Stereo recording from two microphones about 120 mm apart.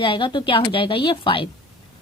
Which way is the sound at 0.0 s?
45° left (ahead or behind).